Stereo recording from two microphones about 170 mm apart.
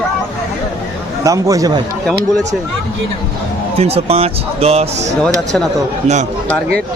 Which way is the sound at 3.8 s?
35° right (ahead or behind).